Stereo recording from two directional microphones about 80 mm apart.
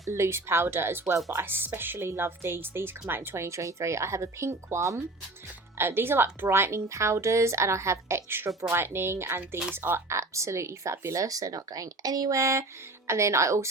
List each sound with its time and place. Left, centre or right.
0.0 s a woman's voice: right
5.7 s a woman's voice: right